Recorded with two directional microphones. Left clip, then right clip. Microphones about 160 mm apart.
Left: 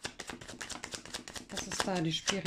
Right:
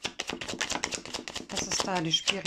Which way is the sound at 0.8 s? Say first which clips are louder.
Right 7 dB; centre (ahead or behind).